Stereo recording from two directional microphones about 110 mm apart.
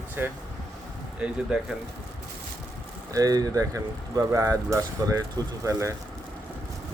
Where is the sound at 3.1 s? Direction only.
35° right (ahead or behind).